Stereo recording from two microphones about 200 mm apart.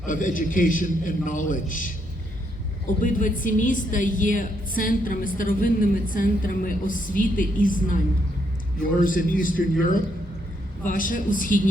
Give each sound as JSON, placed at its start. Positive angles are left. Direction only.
{"t": 0.0, "sound": "a man's voice", "side_deg": 40}
{"t": 3.0, "sound": "a woman's voice", "side_deg": 40}
{"t": 9.0, "sound": "a woman's voice", "side_deg": 45}
{"t": 10.8, "sound": "a woman's voice", "side_deg": 45}